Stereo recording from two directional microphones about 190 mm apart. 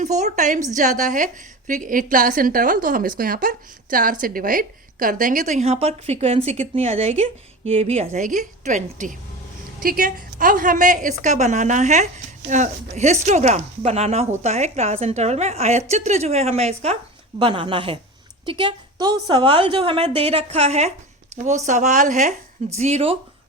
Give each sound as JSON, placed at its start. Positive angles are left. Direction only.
{"t": 0.0, "sound": "a woman's voice", "side_deg": -40}